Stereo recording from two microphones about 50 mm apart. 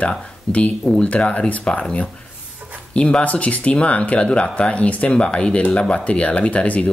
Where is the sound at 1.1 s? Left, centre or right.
Left.